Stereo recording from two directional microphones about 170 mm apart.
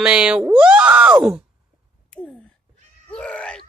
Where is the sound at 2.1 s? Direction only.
5° left (ahead or behind).